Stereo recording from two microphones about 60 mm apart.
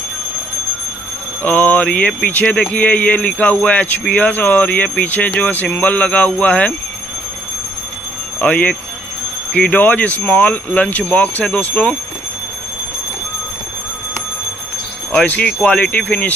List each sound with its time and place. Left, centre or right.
1.4 s mantra: left
2.2 s speech: left
8.4 s speech: left
15.1 s speech: left